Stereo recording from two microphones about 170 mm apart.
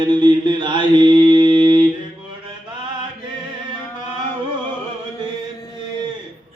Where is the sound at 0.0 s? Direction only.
25° right (ahead or behind).